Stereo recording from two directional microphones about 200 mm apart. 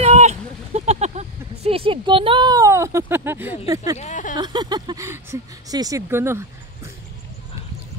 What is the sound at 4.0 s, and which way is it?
Speech, 35° left (ahead or behind).